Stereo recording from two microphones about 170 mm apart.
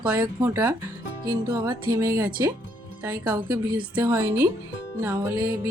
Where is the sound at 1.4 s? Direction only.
25° right (ahead or behind).